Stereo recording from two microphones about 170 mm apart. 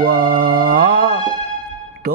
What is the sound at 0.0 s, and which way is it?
Music, 55° right (ahead or behind).